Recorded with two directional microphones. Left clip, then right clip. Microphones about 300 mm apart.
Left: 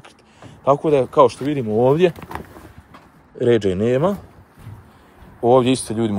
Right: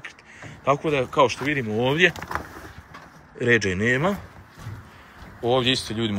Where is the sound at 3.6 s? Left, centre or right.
Centre.